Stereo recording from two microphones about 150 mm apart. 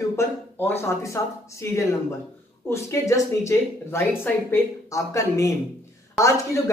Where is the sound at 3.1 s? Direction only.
20° left (ahead or behind).